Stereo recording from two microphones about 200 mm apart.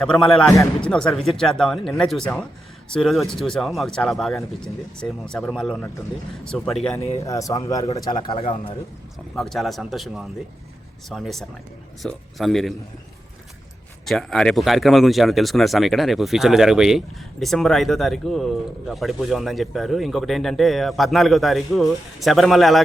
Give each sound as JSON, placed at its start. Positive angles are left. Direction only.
{"t": 0.0, "sound": "speech", "side_deg": 0}
{"t": 7.2, "sound": "speech", "side_deg": 15}
{"t": 9.3, "sound": "speech", "side_deg": 0}
{"t": 14.0, "sound": "speech", "side_deg": 0}